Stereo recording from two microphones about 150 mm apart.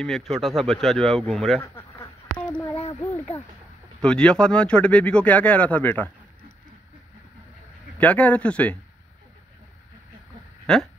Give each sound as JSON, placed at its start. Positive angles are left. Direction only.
{"t": 0.0, "sound": "speech", "side_deg": 0}
{"t": 1.6, "sound": "duck", "side_deg": 20}
{"t": 2.3, "sound": "a sound", "side_deg": 10}
{"t": 2.7, "sound": "a sound", "side_deg": 40}
{"t": 4.0, "sound": "speech", "side_deg": 5}
{"t": 8.0, "sound": "speech", "side_deg": 10}
{"t": 10.7, "sound": "speech", "side_deg": 5}